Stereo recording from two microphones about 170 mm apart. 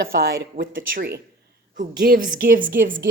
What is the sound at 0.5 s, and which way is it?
Speech, 55° right (ahead or behind).